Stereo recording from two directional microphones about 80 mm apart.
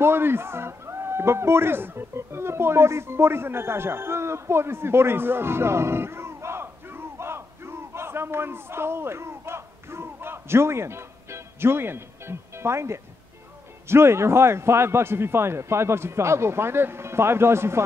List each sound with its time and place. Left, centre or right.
0.0 s a man's voice: right